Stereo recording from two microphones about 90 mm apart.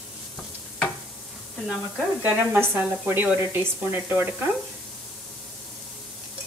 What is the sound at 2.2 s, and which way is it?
Speech, 15° right (ahead or behind).